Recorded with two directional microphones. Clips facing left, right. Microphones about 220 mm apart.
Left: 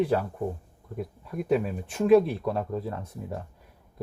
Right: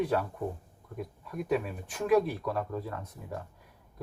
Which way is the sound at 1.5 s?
25° left (ahead or behind).